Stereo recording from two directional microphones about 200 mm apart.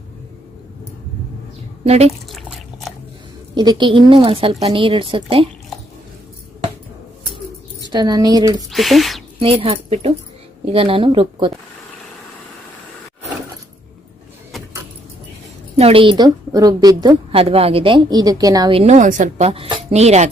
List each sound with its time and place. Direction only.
1.8 s speech: 30° right (ahead or behind)
2.3 s a sound: centre (ahead or behind)
3.5 s a woman's voice: 20° right (ahead or behind)
7.9 s a woman's voice: 20° right (ahead or behind)
8.7 s speech: centre (ahead or behind)
9.4 s a woman's voice: 25° right (ahead or behind)
15.8 s a woman's voice: 30° right (ahead or behind)